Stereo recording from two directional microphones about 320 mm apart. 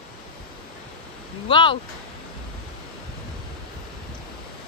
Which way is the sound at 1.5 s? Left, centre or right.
Centre.